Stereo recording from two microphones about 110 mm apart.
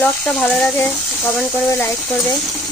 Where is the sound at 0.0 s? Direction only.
10° left (ahead or behind).